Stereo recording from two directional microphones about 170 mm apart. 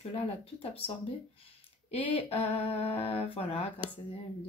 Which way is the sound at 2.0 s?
30° left (ahead or behind).